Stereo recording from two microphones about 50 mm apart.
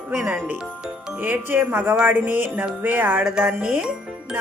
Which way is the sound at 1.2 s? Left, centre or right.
Right.